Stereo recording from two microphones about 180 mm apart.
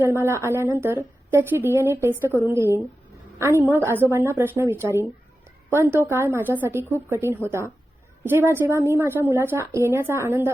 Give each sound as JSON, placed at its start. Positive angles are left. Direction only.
{"t": 0.0, "sound": "a woman's voice", "side_deg": -15}